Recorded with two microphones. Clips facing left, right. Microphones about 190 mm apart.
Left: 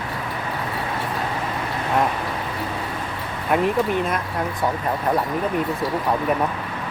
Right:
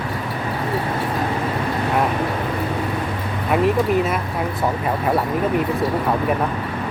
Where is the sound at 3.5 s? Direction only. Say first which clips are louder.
Right 2 dB; centre (ahead or behind).